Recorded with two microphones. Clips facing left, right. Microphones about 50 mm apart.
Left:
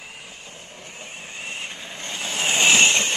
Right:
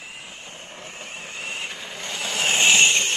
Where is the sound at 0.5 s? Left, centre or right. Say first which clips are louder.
Right 2 dB; right.